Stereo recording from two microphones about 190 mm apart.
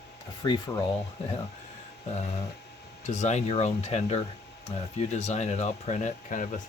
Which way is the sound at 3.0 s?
35° left (ahead or behind).